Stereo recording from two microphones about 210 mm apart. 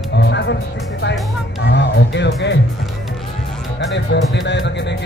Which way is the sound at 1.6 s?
55° left (ahead or behind).